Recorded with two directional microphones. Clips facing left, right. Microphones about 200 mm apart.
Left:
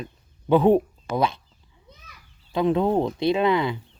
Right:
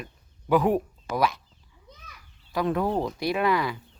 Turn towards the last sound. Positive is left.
turn(degrees=25)  # may be behind; listen again after turning